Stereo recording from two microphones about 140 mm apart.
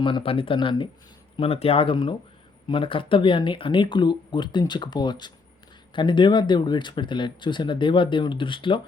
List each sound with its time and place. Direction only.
0.0 s speech: 40° left (ahead or behind)